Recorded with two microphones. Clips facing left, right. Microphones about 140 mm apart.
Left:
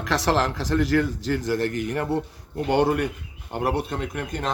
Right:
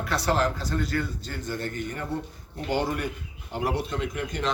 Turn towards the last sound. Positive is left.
turn(degrees=50)  # may be behind; listen again after turning